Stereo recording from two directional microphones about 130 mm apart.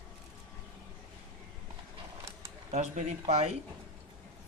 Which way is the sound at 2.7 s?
60° right (ahead or behind).